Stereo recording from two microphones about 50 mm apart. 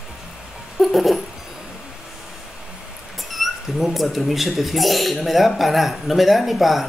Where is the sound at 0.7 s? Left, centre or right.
Centre.